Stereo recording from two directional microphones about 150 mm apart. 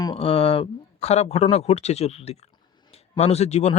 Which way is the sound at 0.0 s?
35° left (ahead or behind).